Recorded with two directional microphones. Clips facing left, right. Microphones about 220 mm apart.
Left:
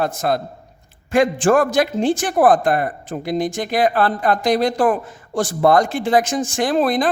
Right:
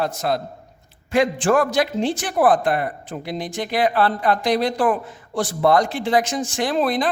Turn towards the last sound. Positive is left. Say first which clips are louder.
# left 3 dB
turn(degrees=45)  # may be behind; listen again after turning